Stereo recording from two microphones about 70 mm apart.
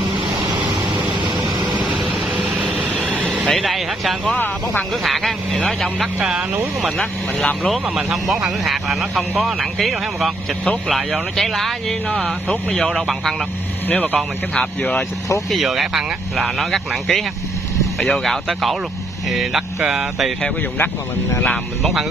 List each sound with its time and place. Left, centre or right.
1.0 s a sound: right
1.8 s vehicle: centre
3.0 s air conditioning: right
3.4 s vehicle: centre
5.0 s speech: centre
6.1 s speech: centre
7.0 s speech: centre
7.9 s speech: centre
13.8 s speech: left
15.5 s speech: centre
18.2 s speech: centre
20.7 s speech: left